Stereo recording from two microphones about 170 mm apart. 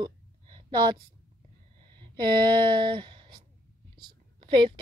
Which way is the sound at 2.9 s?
30° right (ahead or behind).